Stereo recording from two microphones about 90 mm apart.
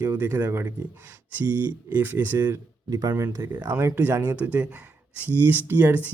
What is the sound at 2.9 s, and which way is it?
Speech, 40° right (ahead or behind).